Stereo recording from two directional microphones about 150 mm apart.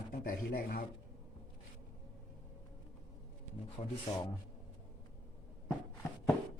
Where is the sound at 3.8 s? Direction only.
50° left (ahead or behind).